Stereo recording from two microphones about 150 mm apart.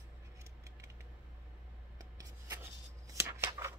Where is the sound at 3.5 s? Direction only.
20° right (ahead or behind).